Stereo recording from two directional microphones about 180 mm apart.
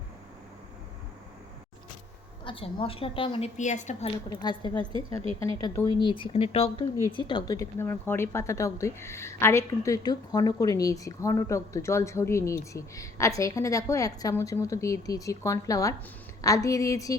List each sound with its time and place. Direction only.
2.4 s speech: 30° left (ahead or behind)
3.6 s a woman's voice: 40° left (ahead or behind); by 4.7 s 25° left (ahead or behind)
4.9 s speech: 30° right (ahead or behind)
5.4 s speech: 20° left (ahead or behind)